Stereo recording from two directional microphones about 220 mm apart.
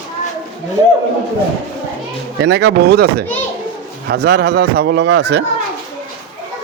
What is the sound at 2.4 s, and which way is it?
Speech, 50° right (ahead or behind).